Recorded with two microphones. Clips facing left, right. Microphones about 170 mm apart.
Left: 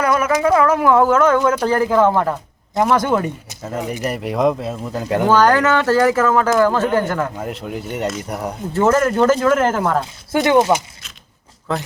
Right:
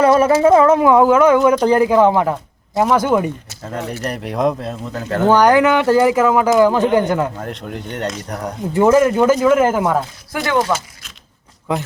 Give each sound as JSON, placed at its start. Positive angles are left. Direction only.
{"t": 0.0, "sound": "a sound", "side_deg": -30}
{"t": 0.4, "sound": "speech", "side_deg": -25}
{"t": 3.8, "sound": "speech", "side_deg": 15}
{"t": 5.3, "sound": "speech", "side_deg": -15}
{"t": 7.3, "sound": "speech", "side_deg": 5}
{"t": 8.7, "sound": "speech", "side_deg": -10}
{"t": 10.3, "sound": "speech", "side_deg": 20}
{"t": 11.7, "sound": "speech", "side_deg": -15}